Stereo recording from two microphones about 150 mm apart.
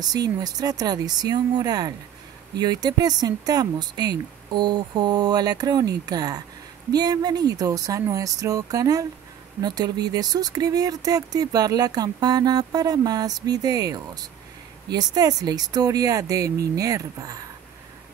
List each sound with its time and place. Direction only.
0.0 s speech: 25° right (ahead or behind)